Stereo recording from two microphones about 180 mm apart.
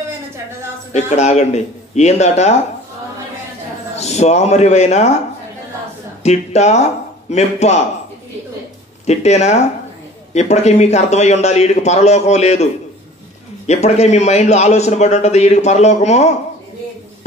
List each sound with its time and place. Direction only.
0.9 s a man's voice: 40° left (ahead or behind)
3.9 s a man's voice: 40° left (ahead or behind)
6.2 s a man's voice: 40° left (ahead or behind)
9.0 s a man's voice: 40° left (ahead or behind)
13.7 s a man's voice: 40° left (ahead or behind)